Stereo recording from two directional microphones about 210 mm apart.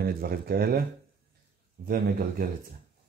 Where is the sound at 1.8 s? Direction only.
45° right (ahead or behind).